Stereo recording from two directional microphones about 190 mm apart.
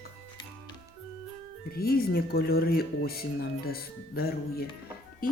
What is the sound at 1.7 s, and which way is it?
Speech, 55° left (ahead or behind).